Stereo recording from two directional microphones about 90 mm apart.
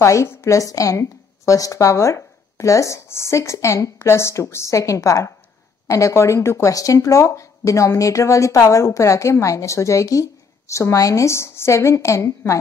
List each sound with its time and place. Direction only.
0.0 s speech: 35° left (ahead or behind)